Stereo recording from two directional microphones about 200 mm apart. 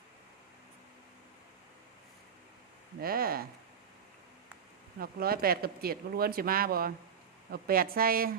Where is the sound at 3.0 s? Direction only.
50° right (ahead or behind).